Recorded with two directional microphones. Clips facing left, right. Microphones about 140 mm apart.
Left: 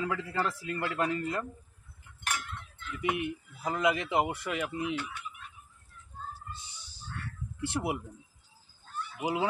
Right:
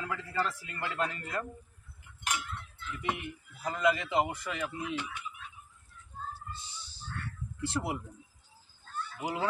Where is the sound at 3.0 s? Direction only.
15° left (ahead or behind).